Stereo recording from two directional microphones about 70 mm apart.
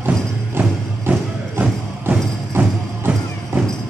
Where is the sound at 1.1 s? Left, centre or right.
Right.